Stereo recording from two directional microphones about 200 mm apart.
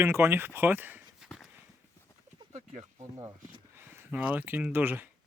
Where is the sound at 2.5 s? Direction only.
35° right (ahead or behind).